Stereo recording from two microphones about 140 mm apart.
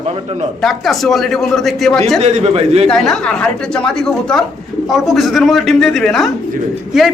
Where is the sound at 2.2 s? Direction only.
50° right (ahead or behind).